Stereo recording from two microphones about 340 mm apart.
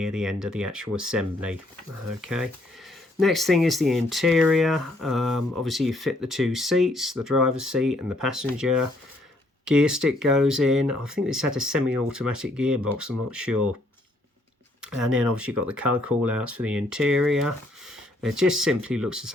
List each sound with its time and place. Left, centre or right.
0.0 s speech: centre
14.8 s speech: centre